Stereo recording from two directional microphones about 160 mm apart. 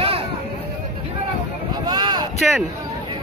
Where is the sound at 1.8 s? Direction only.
25° right (ahead or behind).